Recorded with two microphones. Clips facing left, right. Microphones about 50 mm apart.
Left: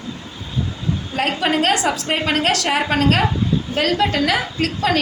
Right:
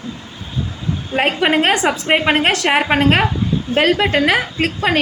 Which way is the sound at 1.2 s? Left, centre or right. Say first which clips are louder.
Right 4 dB; right.